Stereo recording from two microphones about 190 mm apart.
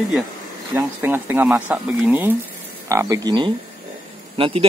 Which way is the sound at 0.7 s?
10° right (ahead or behind).